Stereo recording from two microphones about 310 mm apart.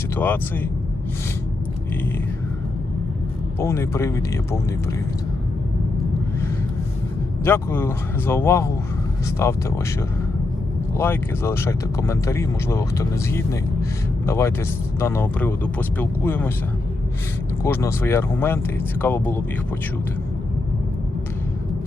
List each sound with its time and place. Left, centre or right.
0.2 s speech: centre
3.6 s speech: centre
7.4 s speech: centre
10.9 s speech: centre
17.6 s speech: centre